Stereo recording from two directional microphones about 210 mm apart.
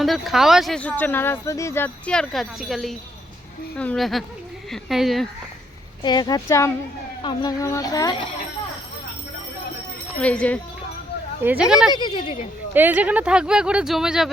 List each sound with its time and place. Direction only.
0.0 s speech: centre (ahead or behind)
6.0 s speech: 20° left (ahead or behind)
10.2 s speech: 5° left (ahead or behind)
11.4 s speech: 5° right (ahead or behind)
11.9 s speech: 20° left (ahead or behind)
12.7 s speech: 10° right (ahead or behind)